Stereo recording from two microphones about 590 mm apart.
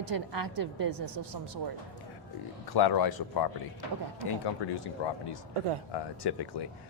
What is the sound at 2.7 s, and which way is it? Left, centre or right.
Speech, left.